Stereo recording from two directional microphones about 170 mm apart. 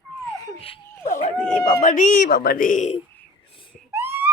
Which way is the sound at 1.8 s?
50° left (ahead or behind).